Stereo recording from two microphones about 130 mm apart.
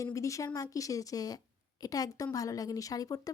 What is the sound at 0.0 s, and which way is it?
A woman's voice, 25° left (ahead or behind).